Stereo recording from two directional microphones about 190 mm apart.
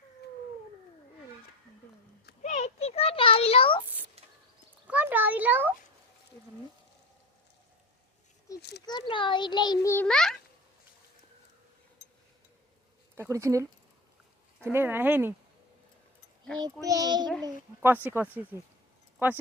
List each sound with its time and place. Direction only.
2.4 s a sound: 35° left (ahead or behind)
4.9 s a sound: 10° right (ahead or behind)
8.9 s a child's voice: 25° left (ahead or behind); by 10.3 s 5° left (ahead or behind)
13.1 s speech: 15° right (ahead or behind)
16.8 s a child's voice: 20° right (ahead or behind)
17.4 s speech: 10° right (ahead or behind)